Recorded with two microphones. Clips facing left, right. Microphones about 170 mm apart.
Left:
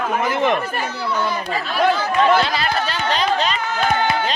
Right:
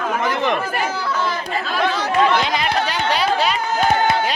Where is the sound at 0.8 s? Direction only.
90° right.